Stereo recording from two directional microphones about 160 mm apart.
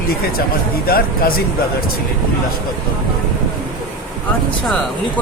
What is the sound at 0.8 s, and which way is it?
Speech, 70° left (ahead or behind).